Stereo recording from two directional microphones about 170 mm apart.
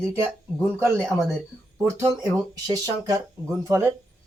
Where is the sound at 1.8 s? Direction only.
15° right (ahead or behind).